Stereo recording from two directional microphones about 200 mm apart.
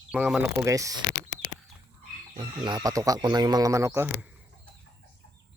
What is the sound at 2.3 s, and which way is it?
Speech, 25° right (ahead or behind).